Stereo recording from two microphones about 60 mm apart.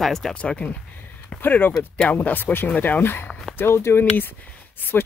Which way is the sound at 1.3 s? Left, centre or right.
Left.